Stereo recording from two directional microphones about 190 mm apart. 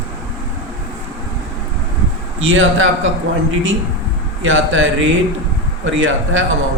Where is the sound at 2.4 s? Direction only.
90° right.